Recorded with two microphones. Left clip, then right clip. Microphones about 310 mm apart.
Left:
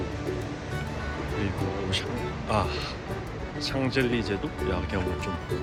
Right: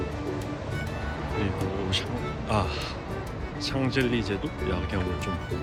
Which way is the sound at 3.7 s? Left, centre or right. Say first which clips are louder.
Even; centre.